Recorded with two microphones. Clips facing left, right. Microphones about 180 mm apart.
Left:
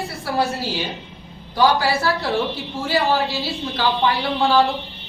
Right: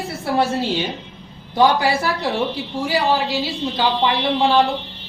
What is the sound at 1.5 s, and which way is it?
A woman's voice, 20° right (ahead or behind).